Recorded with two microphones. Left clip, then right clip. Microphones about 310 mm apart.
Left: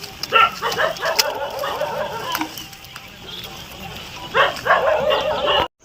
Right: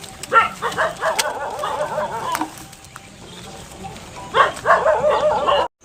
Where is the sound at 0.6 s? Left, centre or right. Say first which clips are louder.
Left 1 dB; centre.